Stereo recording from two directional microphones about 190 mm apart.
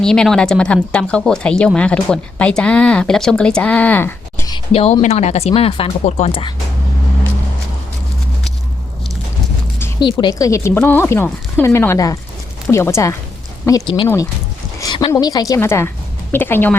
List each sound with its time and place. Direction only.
0.0 s speech: 5° left (ahead or behind); by 6.5 s 30° left (ahead or behind)
10.0 s speech: 25° left (ahead or behind)